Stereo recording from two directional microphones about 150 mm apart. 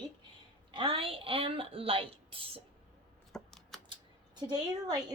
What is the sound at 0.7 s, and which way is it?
A woman's voice, 35° right (ahead or behind).